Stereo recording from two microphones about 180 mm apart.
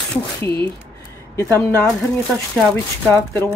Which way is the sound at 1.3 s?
15° left (ahead or behind).